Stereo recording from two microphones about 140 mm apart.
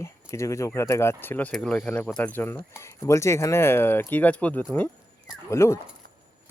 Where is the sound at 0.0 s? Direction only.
20° left (ahead or behind).